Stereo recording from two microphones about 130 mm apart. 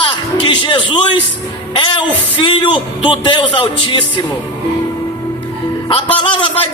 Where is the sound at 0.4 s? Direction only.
35° left (ahead or behind).